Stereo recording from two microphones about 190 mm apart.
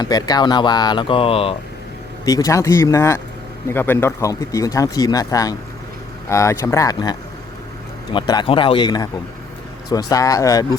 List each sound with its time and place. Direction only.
0.0 s speech: 20° left (ahead or behind)
2.2 s speech: 20° left (ahead or behind)